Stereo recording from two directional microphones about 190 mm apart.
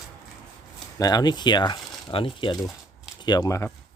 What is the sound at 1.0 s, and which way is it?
Speech, 20° left (ahead or behind).